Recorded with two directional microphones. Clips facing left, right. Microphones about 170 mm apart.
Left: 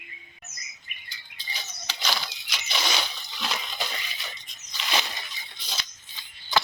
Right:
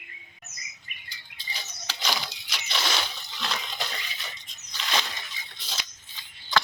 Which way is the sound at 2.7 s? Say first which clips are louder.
Even; 5° left (ahead or behind).